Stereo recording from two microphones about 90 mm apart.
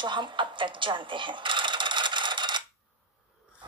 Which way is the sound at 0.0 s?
60° right (ahead or behind).